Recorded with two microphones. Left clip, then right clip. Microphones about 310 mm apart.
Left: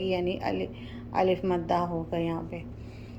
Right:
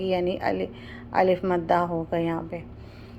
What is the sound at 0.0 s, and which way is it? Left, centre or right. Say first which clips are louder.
A woman's voice: right 4 dB; centre.